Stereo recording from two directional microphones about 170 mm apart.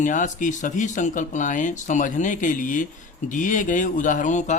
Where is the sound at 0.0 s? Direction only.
50° left (ahead or behind).